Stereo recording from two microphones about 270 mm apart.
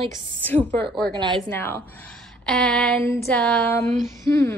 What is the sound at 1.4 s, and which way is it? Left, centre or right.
A woman's voice, centre.